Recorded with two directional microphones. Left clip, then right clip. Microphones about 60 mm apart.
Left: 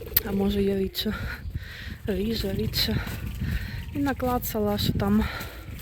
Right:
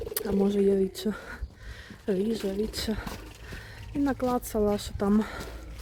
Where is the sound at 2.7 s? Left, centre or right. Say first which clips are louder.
Left 7 dB; right.